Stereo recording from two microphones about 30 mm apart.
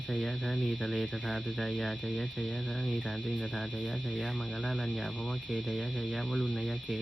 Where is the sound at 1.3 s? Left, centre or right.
Centre.